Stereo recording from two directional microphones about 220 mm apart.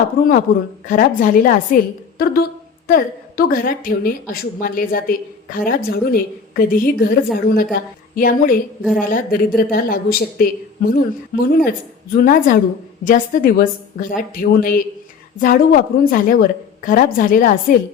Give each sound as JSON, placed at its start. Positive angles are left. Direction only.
{"t": 0.2, "sound": "a woman's voice", "side_deg": 40}